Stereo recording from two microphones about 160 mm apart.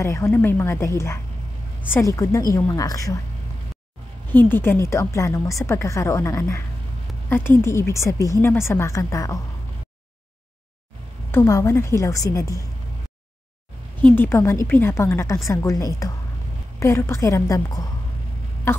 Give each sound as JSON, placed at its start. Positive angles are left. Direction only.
{"t": 0.0, "sound": "a woman's voice", "side_deg": 15}
{"t": 4.3, "sound": "a woman's voice", "side_deg": 10}
{"t": 11.3, "sound": "a woman's voice", "side_deg": 20}
{"t": 14.0, "sound": "a woman's voice", "side_deg": 15}